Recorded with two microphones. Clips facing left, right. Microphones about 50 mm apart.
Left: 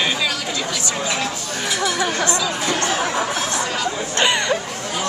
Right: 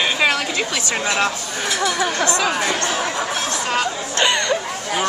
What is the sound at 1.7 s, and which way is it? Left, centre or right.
Speech, centre.